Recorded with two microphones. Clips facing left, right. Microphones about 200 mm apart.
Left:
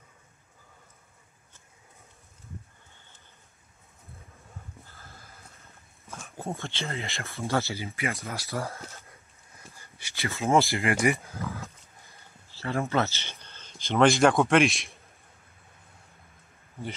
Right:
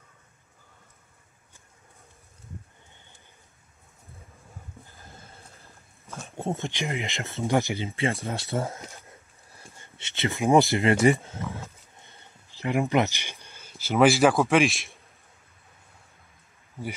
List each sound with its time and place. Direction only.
4.8 s a sound: 15° right (ahead or behind)
5.2 s boat: 30° right (ahead or behind)
6.5 s speech: 15° right (ahead or behind)
7.9 s speech: 30° right (ahead or behind)
8.6 s speech: 15° right (ahead or behind)
9.1 s speech: 30° right (ahead or behind); by 15.0 s centre (ahead or behind)